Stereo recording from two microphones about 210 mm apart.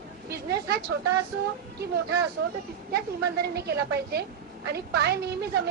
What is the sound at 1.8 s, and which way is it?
Speech, 50° right (ahead or behind).